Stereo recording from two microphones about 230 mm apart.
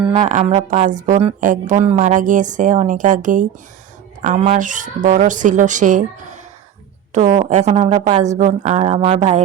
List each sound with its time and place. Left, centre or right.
0.2 s a woman's voice: right